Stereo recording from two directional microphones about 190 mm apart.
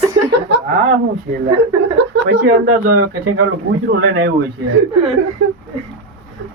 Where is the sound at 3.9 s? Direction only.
90° right.